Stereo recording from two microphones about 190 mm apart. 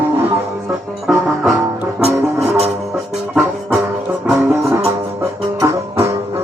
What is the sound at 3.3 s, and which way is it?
Music, centre (ahead or behind).